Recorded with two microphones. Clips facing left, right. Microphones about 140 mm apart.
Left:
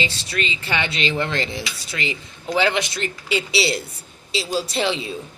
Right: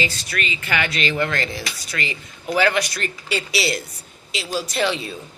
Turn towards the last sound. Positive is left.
turn(degrees=25)  # may be behind; listen again after turning